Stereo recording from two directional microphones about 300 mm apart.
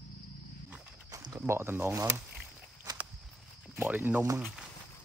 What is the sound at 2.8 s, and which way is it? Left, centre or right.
Walk, centre.